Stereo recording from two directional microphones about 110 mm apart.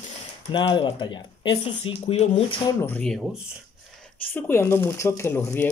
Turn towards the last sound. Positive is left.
turn(degrees=20)  # may be behind; listen again after turning